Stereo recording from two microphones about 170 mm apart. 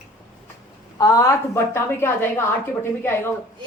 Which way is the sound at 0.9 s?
20° left (ahead or behind).